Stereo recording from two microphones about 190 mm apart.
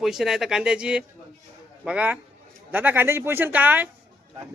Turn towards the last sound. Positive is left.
turn(degrees=-10)  # may be behind; listen again after turning